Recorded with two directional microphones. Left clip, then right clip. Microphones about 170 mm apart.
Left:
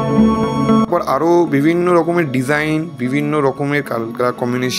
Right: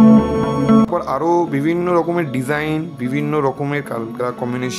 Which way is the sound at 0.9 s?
15° left (ahead or behind).